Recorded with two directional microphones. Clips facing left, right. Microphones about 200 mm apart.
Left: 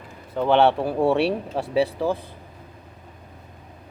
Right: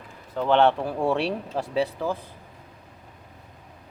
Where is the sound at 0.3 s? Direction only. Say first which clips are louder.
Left 2 dB; 5° left (ahead or behind).